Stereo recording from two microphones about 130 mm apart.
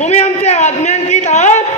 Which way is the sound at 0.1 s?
60° left (ahead or behind).